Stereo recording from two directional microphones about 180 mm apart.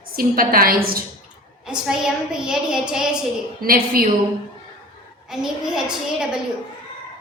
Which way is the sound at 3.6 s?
55° right (ahead or behind).